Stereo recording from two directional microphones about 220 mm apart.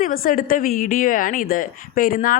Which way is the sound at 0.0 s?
40° left (ahead or behind).